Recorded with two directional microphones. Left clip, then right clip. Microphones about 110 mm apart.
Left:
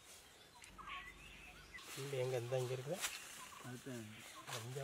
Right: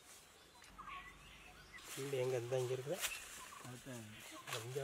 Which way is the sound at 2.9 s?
45° right (ahead or behind).